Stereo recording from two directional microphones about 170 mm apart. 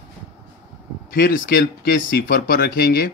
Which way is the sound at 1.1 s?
65° left (ahead or behind).